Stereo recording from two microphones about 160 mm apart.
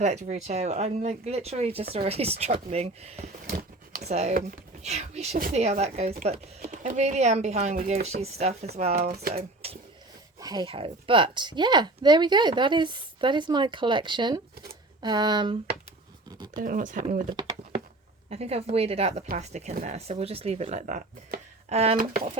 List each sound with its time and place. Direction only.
0.0 s speech: 45° right (ahead or behind)
6.6 s speech: 50° right (ahead or behind)
9.0 s speech: 70° right (ahead or behind)
9.3 s speech: 40° right (ahead or behind)
10.4 s speech: 25° right (ahead or behind)
16.6 s speech: 55° right (ahead or behind)
18.3 s speech: 40° right (ahead or behind)
21.9 s speech: 60° right (ahead or behind)